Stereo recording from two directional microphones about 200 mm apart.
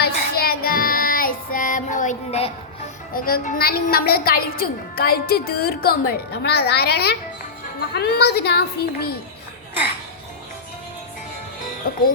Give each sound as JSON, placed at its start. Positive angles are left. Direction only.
{"t": 0.0, "sound": "child singing", "side_deg": 50}
{"t": 3.1, "sound": "a woman's voice", "side_deg": 45}
{"t": 11.9, "sound": "music", "side_deg": 45}